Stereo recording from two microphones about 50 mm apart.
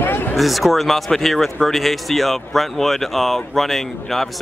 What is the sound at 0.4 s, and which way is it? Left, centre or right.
Speech, centre.